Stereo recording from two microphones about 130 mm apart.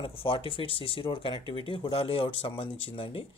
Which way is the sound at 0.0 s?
45° left (ahead or behind).